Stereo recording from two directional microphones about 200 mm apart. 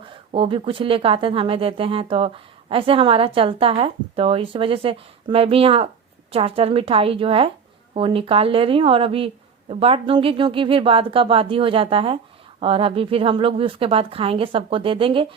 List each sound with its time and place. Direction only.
0.3 s speech: 25° right (ahead or behind)